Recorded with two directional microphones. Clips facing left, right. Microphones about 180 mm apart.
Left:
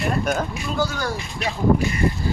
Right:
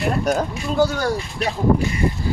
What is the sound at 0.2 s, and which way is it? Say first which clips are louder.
Speech: right 3 dB; 35° right (ahead or behind).